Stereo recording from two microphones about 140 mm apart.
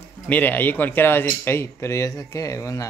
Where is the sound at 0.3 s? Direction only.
10° left (ahead or behind).